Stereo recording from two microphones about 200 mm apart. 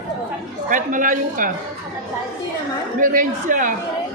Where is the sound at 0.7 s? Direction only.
40° right (ahead or behind).